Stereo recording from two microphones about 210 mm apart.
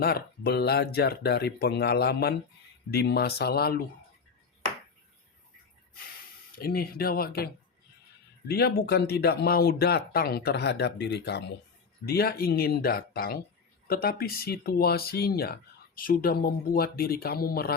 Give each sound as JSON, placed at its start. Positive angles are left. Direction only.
{"t": 0.0, "sound": "speech", "side_deg": 50}
{"t": 6.6, "sound": "speech", "side_deg": 45}